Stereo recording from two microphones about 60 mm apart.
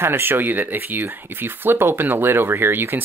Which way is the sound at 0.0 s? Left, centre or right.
Right.